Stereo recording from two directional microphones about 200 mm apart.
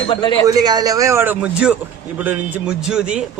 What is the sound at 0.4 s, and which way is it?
A man's voice, 20° right (ahead or behind).